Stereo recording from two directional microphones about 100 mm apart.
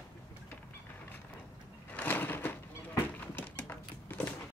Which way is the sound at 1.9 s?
15° left (ahead or behind).